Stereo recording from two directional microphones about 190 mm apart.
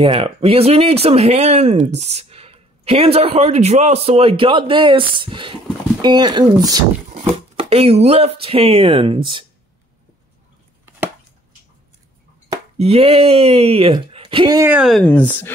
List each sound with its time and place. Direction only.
0.0 s speech: 30° right (ahead or behind)
7.5 s speech: 30° right (ahead or behind)
12.7 s speech: 30° right (ahead or behind)
14.7 s speech: centre (ahead or behind)